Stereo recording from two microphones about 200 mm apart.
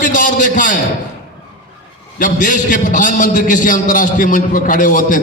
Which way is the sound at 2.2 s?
40° left (ahead or behind).